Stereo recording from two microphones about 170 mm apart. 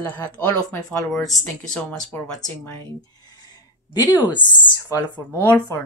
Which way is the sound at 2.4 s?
20° left (ahead or behind).